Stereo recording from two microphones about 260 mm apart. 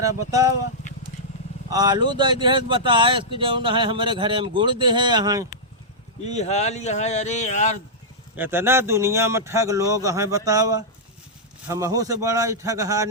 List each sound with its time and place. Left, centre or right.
0.0 s speech: centre
1.7 s speech: centre
6.2 s speech: left
8.4 s speech: centre